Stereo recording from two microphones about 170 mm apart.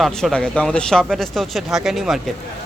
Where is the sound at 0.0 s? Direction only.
Centre (ahead or behind).